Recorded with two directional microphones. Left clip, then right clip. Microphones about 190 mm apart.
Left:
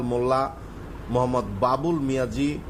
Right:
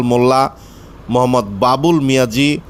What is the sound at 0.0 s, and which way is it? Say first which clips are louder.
Speech: right 11 dB; 45° right (ahead or behind).